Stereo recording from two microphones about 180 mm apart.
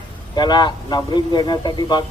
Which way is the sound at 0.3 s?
25° left (ahead or behind).